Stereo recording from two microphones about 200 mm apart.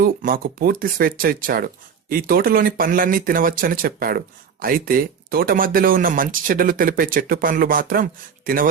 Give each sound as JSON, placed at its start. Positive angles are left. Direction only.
{"t": 0.0, "sound": "speech", "side_deg": -45}